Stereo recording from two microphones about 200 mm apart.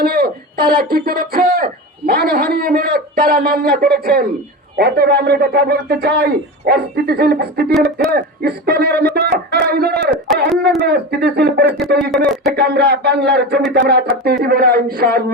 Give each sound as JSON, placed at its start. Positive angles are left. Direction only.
{"t": 0.0, "sound": "speech", "side_deg": -50}
{"t": 12.1, "sound": "speech", "side_deg": 0}
{"t": 12.5, "sound": "speech", "side_deg": -55}